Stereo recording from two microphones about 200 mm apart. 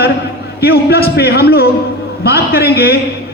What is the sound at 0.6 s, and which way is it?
A man's voice, 50° left (ahead or behind).